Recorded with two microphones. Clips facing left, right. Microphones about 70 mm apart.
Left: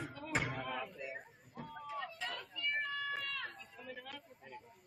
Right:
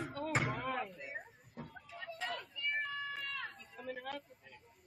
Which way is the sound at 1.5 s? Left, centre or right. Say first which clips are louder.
Left 6 dB; left.